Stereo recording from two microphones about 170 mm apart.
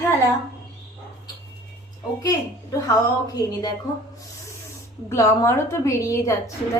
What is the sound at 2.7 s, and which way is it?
Speech, 20° left (ahead or behind).